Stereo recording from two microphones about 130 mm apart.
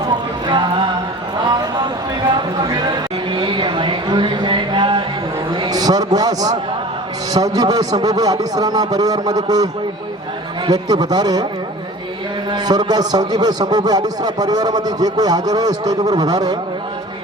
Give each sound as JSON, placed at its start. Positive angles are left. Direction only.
{"t": 0.4, "sound": "music", "side_deg": -35}
{"t": 1.5, "sound": "a sound", "side_deg": -30}
{"t": 3.3, "sound": "a sound", "side_deg": -40}
{"t": 5.6, "sound": "a man's voice", "side_deg": -30}
{"t": 10.7, "sound": "a man's voice", "side_deg": -30}
{"t": 12.5, "sound": "a man's voice", "side_deg": -35}